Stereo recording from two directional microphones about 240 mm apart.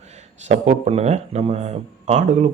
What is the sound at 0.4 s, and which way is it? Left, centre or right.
Speech, right.